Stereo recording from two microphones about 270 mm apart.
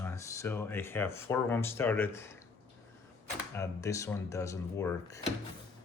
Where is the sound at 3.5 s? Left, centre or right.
Centre.